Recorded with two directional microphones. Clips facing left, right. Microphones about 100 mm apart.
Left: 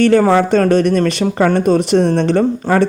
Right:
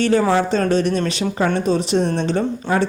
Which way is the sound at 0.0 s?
55° left (ahead or behind).